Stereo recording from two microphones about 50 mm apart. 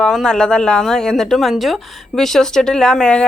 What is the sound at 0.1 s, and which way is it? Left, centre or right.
Speech, centre.